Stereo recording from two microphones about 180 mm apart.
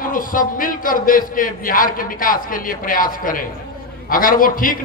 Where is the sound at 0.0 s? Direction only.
50° left (ahead or behind).